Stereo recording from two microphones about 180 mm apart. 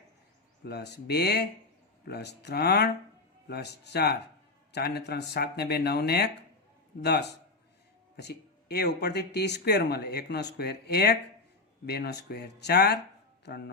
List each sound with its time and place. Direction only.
0.6 s speech: 65° left (ahead or behind)